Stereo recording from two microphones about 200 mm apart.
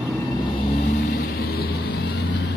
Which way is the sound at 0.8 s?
50° left (ahead or behind).